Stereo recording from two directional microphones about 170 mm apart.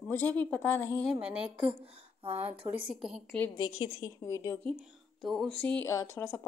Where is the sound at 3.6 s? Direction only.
25° left (ahead or behind).